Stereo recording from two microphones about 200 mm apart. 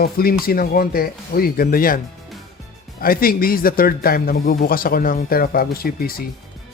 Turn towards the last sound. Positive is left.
turn(degrees=50)  # may be behind; listen again after turning